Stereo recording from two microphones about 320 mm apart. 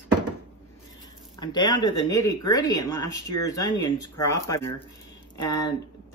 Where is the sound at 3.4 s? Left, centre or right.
Centre.